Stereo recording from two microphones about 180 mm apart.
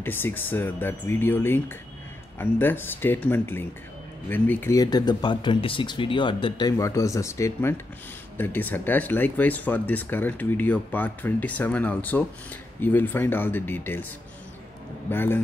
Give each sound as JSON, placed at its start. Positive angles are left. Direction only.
{"t": 0.0, "sound": "speech", "side_deg": 10}
{"t": 15.0, "sound": "speech", "side_deg": 10}